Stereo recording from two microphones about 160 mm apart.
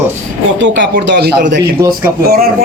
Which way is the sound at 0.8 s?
90° right.